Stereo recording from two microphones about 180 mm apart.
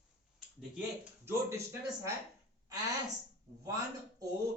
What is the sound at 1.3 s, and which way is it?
Speech, 15° right (ahead or behind).